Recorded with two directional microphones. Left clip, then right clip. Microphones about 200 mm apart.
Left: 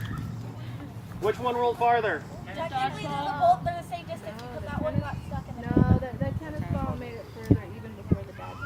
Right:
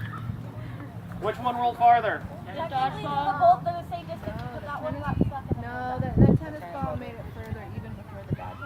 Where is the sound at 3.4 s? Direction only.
25° left (ahead or behind).